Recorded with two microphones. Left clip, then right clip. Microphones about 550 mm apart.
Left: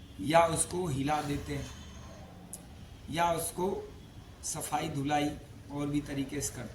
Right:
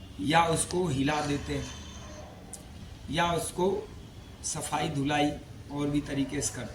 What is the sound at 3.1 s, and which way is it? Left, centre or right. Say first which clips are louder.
Speech: right 2 dB; left.